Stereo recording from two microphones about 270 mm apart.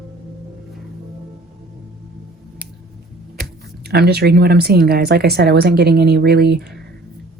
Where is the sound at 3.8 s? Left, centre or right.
Right.